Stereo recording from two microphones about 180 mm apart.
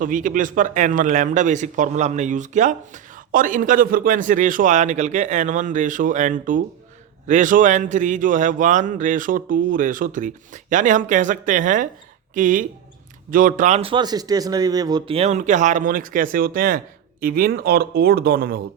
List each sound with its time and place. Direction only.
0.0 s speech: 45° right (ahead or behind)